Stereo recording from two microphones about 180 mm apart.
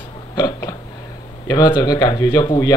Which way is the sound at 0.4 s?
20° left (ahead or behind).